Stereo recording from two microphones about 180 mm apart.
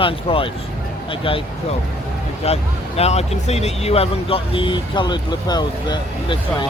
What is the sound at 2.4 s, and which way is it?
Speech, 35° left (ahead or behind).